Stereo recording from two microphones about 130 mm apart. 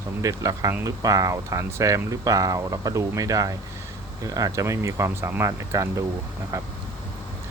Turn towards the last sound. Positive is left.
turn(degrees=-20)  # may be behind; listen again after turning